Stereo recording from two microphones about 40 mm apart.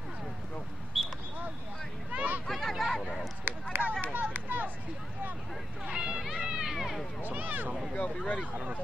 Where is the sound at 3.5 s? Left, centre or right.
Right.